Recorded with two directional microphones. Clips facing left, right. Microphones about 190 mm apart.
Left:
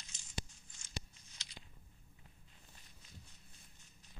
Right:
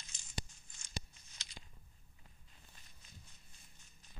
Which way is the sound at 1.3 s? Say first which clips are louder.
Right 1 dB; 45° right (ahead or behind).